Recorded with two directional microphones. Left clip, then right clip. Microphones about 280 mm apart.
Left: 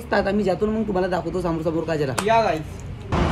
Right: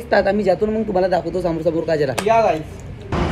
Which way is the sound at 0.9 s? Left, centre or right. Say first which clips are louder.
Right 7 dB; left.